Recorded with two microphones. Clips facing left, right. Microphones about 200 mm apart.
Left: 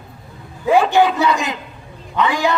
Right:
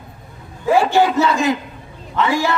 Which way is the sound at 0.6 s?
15° left (ahead or behind).